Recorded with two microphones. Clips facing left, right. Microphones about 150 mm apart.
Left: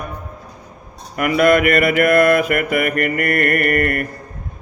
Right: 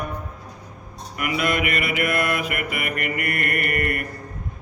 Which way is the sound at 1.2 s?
45° left (ahead or behind).